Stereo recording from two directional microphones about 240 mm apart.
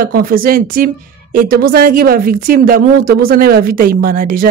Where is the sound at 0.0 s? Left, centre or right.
Right.